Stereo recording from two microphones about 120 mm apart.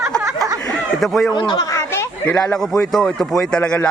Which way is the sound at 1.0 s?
Centre (ahead or behind).